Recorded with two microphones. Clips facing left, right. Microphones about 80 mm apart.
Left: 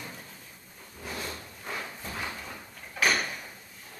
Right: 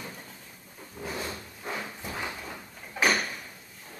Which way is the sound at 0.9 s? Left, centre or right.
Centre.